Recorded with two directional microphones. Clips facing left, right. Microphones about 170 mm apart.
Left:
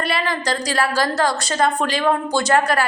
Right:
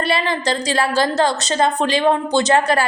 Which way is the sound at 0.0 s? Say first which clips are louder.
Right 3 dB; 25° right (ahead or behind).